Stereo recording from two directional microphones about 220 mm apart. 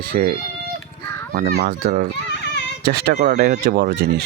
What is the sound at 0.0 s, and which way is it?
A child's voice, 40° right (ahead or behind).